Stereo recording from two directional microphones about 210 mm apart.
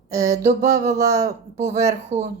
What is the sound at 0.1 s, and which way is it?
Speech, 15° right (ahead or behind).